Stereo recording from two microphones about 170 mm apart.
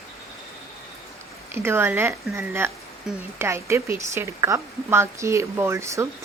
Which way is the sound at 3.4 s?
15° right (ahead or behind).